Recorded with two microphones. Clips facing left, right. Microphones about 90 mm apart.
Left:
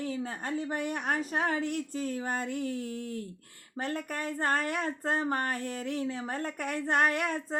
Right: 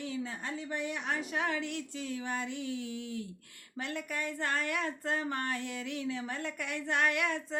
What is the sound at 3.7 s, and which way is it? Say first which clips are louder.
Speech: left 3 dB; 40° left (ahead or behind).